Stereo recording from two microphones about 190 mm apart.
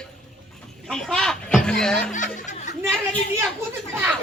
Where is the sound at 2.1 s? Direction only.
40° left (ahead or behind).